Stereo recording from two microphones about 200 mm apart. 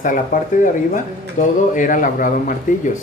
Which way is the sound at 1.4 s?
35° left (ahead or behind).